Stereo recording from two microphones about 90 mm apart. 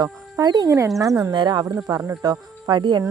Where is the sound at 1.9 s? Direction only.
35° right (ahead or behind).